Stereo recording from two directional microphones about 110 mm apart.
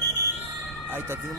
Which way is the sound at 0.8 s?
20° right (ahead or behind).